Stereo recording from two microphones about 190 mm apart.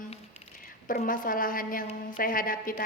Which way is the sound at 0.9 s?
45° left (ahead or behind).